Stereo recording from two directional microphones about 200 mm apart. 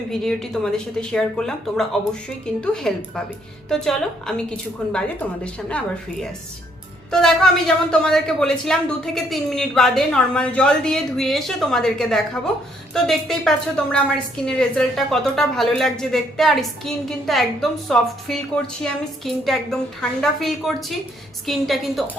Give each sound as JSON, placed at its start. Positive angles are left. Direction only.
{"t": 0.1, "sound": "a woman's voice", "side_deg": 0}
{"t": 7.1, "sound": "a woman's voice", "side_deg": 5}